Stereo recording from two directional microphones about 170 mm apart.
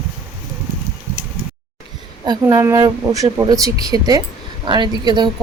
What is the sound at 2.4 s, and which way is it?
Speech, 15° right (ahead or behind).